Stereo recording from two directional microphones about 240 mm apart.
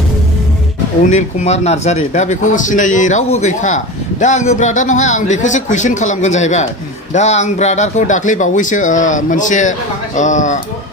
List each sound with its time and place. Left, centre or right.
1.0 s a man's voice: left